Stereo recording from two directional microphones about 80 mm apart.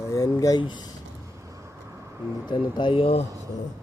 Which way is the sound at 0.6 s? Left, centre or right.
Left.